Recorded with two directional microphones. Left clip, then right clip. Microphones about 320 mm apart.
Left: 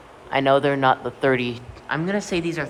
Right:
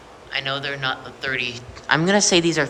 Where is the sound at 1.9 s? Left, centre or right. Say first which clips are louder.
Right 7 dB; centre.